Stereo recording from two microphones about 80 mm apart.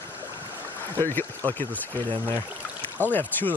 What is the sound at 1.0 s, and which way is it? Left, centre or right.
Speech, left.